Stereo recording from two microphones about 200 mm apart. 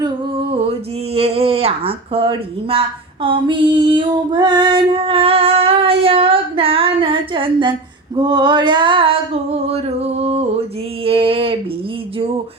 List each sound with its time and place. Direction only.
0.5 s speech: 30° right (ahead or behind)
3.2 s female singing: 25° right (ahead or behind)
11.0 s a sound: 25° right (ahead or behind)